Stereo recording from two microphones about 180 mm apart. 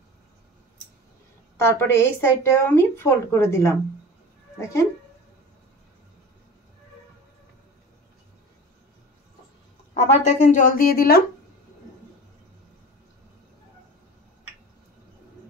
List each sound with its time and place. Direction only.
1.6 s a woman's voice: 15° left (ahead or behind)
9.9 s speech: 40° left (ahead or behind); by 11.2 s 55° left (ahead or behind)